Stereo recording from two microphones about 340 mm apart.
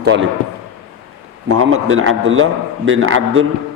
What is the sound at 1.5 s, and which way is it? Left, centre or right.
A man's voice, right.